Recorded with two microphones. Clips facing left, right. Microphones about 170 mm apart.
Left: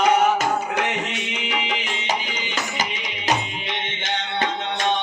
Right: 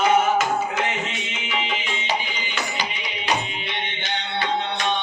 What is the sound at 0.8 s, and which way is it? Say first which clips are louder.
Music: left 1 dB; 65° left (ahead or behind).